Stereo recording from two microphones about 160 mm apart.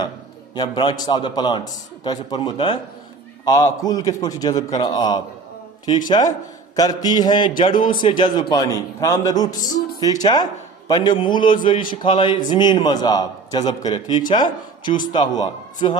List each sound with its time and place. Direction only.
0.5 s a man's voice: 30° left (ahead or behind)